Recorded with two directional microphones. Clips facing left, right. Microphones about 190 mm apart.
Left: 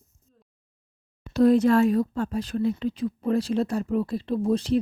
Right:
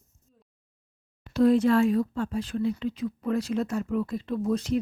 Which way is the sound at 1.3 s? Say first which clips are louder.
Left 2 dB; 40° left (ahead or behind).